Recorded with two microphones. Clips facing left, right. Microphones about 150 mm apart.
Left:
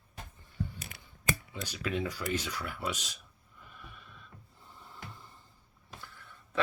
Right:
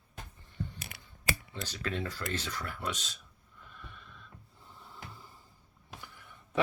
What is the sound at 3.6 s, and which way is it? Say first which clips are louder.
Snort: even; 5° left (ahead or behind).